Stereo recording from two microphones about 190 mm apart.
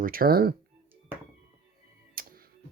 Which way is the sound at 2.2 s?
50° right (ahead or behind).